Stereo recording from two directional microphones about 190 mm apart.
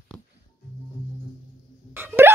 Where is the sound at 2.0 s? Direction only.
10° right (ahead or behind).